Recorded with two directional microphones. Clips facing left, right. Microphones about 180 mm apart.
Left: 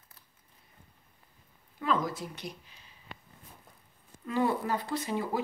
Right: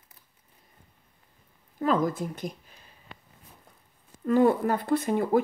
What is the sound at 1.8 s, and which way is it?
A woman's voice, 50° right (ahead or behind).